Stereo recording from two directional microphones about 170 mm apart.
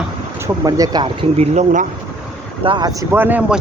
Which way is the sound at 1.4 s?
45° right (ahead or behind).